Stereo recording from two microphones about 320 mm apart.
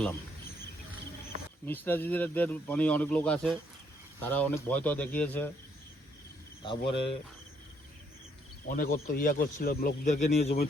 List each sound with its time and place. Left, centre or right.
1.6 s speech: centre
6.6 s cricket: centre
8.7 s speech: left